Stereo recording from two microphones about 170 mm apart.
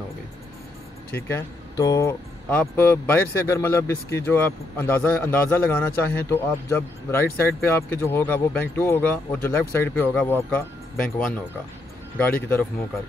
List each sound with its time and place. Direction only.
1.1 s speech: 15° left (ahead or behind)